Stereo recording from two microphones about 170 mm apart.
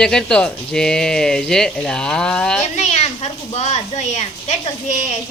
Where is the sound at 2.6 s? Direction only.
40° left (ahead or behind).